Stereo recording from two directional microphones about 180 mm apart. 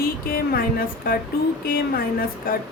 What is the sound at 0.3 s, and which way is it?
Speech, 55° left (ahead or behind).